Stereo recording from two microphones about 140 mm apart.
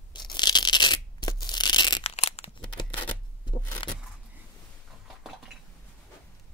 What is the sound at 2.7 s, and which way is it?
Shuffling cards, 35° left (ahead or behind).